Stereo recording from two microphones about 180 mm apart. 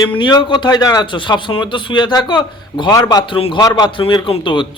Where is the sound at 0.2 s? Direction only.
25° left (ahead or behind).